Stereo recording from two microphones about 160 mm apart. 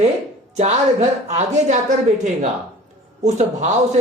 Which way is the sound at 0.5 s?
45° right (ahead or behind).